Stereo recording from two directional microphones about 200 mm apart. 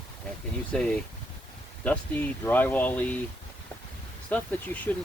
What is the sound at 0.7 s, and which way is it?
Speech, 5° left (ahead or behind).